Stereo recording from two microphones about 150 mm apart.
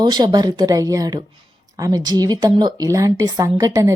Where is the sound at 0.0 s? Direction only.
30° right (ahead or behind).